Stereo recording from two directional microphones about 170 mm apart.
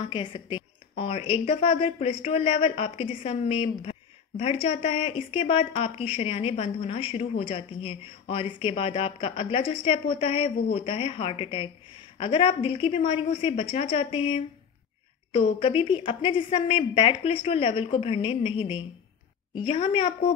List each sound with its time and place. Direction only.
0.0 s speech: 30° left (ahead or behind)